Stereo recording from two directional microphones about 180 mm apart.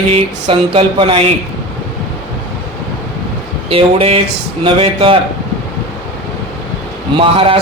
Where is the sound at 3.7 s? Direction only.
30° right (ahead or behind).